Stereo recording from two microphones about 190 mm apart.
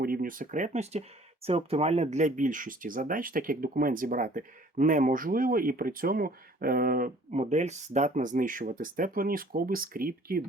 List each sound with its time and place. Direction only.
0.0 s speech: 50° right (ahead or behind)